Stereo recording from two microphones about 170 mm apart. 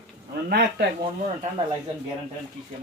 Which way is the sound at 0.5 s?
70° right (ahead or behind).